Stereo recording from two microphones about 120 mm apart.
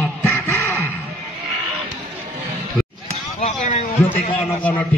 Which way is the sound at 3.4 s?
90° left.